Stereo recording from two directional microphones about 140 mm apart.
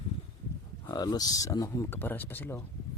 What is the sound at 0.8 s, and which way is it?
Speech, 30° left (ahead or behind).